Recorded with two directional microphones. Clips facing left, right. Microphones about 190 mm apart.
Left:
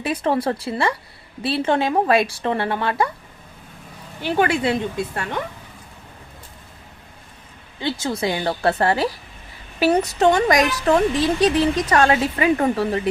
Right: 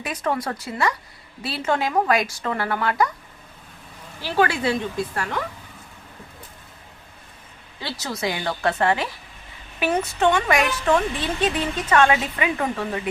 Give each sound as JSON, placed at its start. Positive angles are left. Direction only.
{"t": 0.0, "sound": "speech", "side_deg": 30}
{"t": 4.2, "sound": "speech", "side_deg": 20}
{"t": 7.8, "sound": "speech", "side_deg": 25}